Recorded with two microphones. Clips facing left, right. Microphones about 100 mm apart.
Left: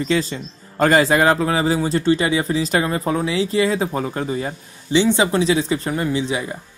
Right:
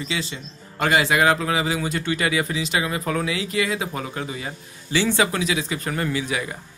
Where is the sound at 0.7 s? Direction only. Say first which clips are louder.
Left 5 dB; 40° left (ahead or behind).